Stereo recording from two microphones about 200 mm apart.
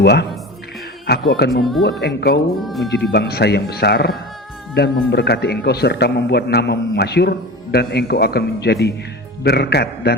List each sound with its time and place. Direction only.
0.0 s a man's voice: 55° left (ahead or behind)
1.4 s a man's voice: 55° left (ahead or behind)
2.6 s speech: centre (ahead or behind)
3.0 s a man's voice: 55° left (ahead or behind)